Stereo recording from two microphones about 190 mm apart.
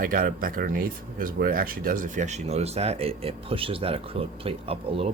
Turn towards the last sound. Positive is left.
turn(degrees=-30)  # may be behind; listen again after turning